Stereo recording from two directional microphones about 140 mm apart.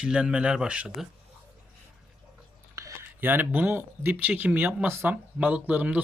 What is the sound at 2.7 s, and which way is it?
Speech, 20° right (ahead or behind).